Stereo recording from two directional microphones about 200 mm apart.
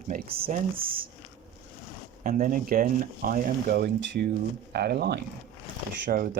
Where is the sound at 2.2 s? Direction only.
45° right (ahead or behind).